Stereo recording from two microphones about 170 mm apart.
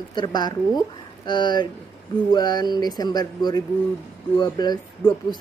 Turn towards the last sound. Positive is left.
turn(degrees=25)  # may be behind; listen again after turning